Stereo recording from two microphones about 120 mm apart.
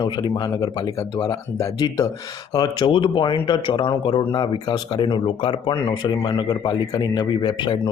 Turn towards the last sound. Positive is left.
turn(degrees=40)  # may be behind; listen again after turning